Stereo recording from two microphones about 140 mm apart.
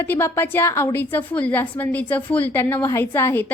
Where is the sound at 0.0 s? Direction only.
15° left (ahead or behind).